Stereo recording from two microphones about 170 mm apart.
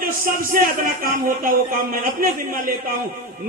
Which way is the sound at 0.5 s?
55° right (ahead or behind).